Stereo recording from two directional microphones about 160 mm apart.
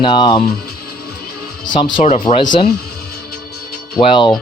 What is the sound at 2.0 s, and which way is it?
Speech, 45° left (ahead or behind).